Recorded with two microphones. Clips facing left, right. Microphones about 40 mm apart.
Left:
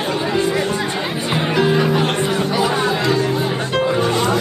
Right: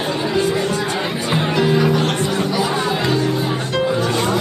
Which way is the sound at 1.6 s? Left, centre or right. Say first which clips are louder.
Even; centre.